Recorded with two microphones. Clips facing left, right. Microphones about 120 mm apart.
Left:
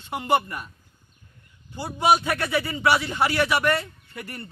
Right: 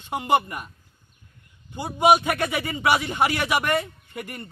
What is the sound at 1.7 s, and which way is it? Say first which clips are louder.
A man's voice: right 3 dB; 15° right (ahead or behind).